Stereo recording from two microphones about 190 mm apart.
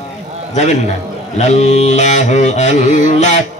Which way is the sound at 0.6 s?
40° left (ahead or behind).